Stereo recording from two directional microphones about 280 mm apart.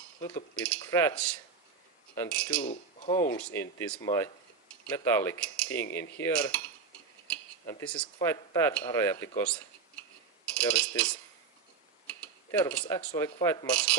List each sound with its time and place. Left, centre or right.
0.2 s cutlery: centre
2.1 s speech: centre
2.6 s speech: left
3.1 s cutlery: centre
7.3 s speech: centre
10.7 s speech: centre
12.5 s speech: centre
13.1 s cutlery: centre